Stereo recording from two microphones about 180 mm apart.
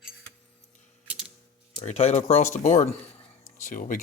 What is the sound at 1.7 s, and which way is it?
Speech, 35° left (ahead or behind).